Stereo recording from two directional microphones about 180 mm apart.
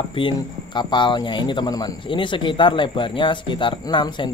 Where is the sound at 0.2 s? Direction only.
25° left (ahead or behind).